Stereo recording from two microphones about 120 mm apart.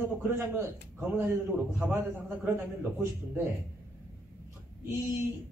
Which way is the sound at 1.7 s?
15° right (ahead or behind).